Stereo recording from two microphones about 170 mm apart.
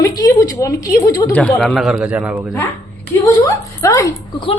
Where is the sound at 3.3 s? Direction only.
20° left (ahead or behind).